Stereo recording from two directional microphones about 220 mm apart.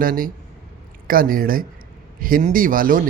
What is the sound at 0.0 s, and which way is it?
Speech, 40° right (ahead or behind).